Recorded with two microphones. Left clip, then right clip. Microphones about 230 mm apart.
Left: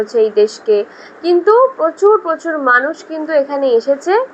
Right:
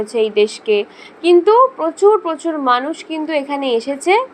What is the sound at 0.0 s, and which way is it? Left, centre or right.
Speech, right.